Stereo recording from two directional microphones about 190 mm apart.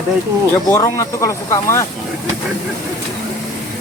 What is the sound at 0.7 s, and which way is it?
Speech, 15° left (ahead or behind).